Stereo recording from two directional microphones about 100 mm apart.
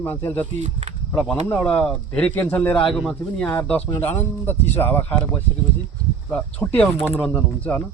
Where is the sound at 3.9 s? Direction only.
20° left (ahead or behind).